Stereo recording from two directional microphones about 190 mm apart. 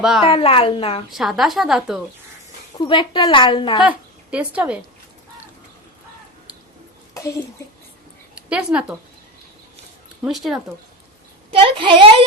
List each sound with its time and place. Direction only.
0.3 s a woman's voice: 30° left (ahead or behind)
1.1 s a woman's voice: centre (ahead or behind)
2.7 s a woman's voice: 25° left (ahead or behind)
3.8 s a woman's voice: 5° right (ahead or behind)
7.1 s a sound: 15° left (ahead or behind)
8.4 s speech: 5° right (ahead or behind)
10.2 s a woman's voice: centre (ahead or behind)
11.5 s a woman's voice: 30° right (ahead or behind)